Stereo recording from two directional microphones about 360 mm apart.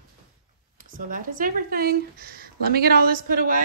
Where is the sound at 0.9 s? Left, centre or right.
Right.